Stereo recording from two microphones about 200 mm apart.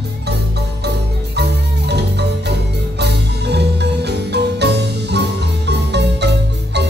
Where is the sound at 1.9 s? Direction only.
55° right (ahead or behind).